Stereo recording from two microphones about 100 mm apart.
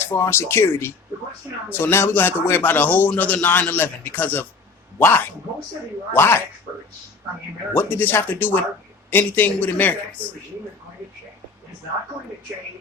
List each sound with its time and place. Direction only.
0.0 s a man's voice: 25° left (ahead or behind)
7.7 s a man's voice: 20° left (ahead or behind)